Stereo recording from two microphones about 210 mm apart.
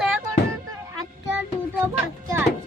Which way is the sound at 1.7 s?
10° right (ahead or behind).